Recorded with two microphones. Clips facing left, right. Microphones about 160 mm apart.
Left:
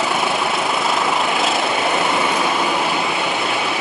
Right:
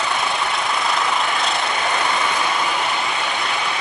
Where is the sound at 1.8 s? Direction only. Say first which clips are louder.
Left 3 dB; 20° left (ahead or behind).